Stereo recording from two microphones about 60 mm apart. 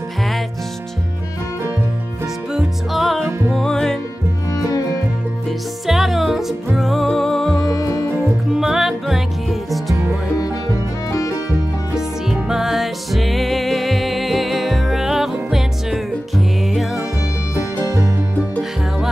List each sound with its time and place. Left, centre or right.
2.5 s music: centre
5.9 s music: centre
7.6 s music: left
8.5 s music: centre
11.1 s music: left
11.9 s music: centre